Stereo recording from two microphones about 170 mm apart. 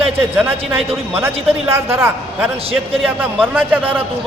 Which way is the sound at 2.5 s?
35° right (ahead or behind).